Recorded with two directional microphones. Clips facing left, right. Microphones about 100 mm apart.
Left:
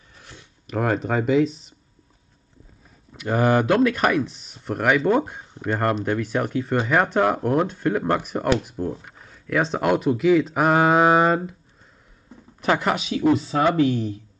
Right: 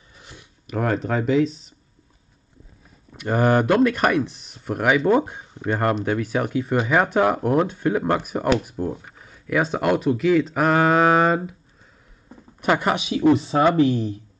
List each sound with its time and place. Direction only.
0.2 s a sound: 10° right (ahead or behind)
0.7 s speech: 5° left (ahead or behind)
3.3 s speech: 5° right (ahead or behind)
10.8 s a sound: 15° left (ahead or behind)
11.2 s speech: 5° right (ahead or behind)
12.6 s speech: 10° right (ahead or behind)
13.1 s speech: 25° right (ahead or behind)